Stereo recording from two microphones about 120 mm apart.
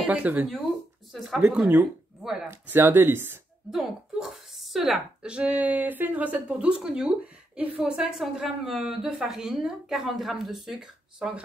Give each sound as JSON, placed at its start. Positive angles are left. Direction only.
{"t": 0.0, "sound": "speech", "side_deg": -10}
{"t": 1.1, "sound": "speech", "side_deg": 0}
{"t": 3.7, "sound": "speech", "side_deg": -5}